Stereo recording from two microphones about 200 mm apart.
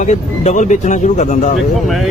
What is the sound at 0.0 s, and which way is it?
Speech, 35° left (ahead or behind).